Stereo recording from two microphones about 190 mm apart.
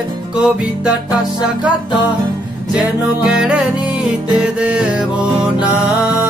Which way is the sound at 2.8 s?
5° right (ahead or behind).